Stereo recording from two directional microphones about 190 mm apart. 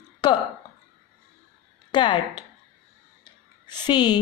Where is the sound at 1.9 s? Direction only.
25° left (ahead or behind).